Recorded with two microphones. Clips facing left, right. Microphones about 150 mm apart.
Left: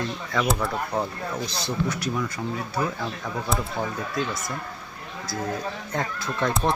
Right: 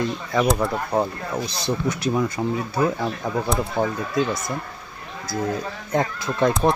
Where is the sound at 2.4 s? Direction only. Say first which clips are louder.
Right 6 dB; 35° right (ahead or behind).